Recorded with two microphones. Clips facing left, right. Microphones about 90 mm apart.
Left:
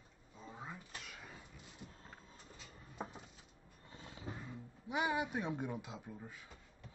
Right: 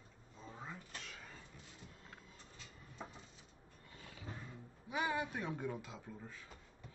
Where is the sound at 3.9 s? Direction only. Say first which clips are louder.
Left 3 dB; 25° left (ahead or behind).